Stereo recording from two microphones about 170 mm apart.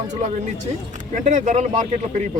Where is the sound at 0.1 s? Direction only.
45° right (ahead or behind).